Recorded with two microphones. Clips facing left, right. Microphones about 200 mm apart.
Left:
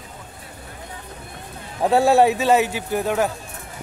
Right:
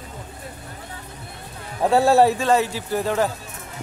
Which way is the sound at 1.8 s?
Centre (ahead or behind).